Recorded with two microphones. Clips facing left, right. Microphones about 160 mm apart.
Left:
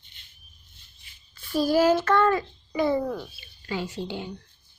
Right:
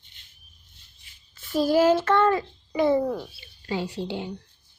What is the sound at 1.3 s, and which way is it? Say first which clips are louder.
A child's voice: right 1 dB; 20° right (ahead or behind).